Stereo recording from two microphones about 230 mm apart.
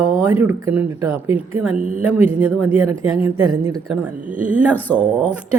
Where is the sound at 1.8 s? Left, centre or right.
Right.